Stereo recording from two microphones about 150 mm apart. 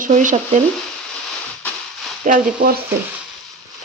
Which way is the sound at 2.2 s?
70° right (ahead or behind).